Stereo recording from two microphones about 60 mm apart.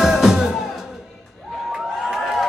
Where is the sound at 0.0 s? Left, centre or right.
Centre.